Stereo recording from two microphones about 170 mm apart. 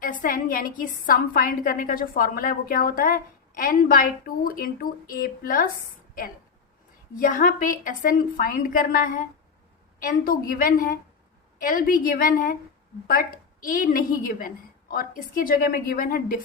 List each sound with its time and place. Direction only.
0.0 s a woman's voice: 55° left (ahead or behind)
7.2 s a woman's voice: 50° left (ahead or behind)